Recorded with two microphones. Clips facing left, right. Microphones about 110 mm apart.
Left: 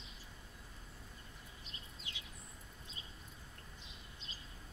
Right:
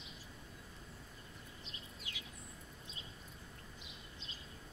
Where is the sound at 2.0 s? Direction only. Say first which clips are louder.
Right 1 dB; 25° left (ahead or behind).